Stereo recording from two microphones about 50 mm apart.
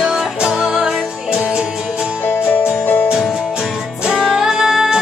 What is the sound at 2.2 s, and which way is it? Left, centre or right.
Music, left.